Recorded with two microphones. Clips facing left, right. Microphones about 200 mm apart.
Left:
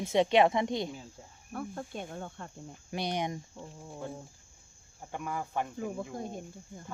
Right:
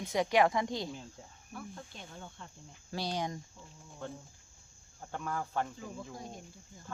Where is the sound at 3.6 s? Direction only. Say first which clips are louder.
Left 9 dB; 60° left (ahead or behind).